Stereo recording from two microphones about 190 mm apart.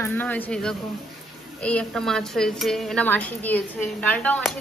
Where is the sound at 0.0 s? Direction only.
10° left (ahead or behind).